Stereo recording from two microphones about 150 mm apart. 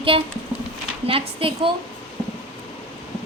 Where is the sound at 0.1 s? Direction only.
40° right (ahead or behind).